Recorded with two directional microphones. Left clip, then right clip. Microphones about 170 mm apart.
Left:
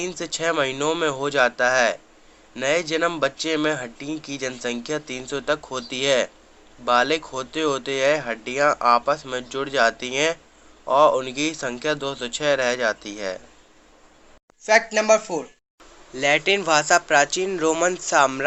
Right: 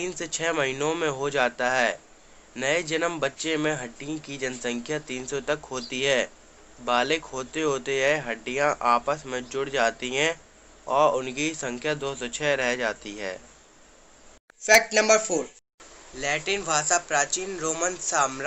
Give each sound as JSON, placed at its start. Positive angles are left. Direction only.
{"t": 0.2, "sound": "speech", "side_deg": 15}
{"t": 14.6, "sound": "speech", "side_deg": 50}